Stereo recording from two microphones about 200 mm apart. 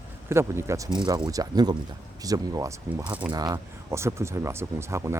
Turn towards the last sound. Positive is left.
turn(degrees=-15)  # may be behind; listen again after turning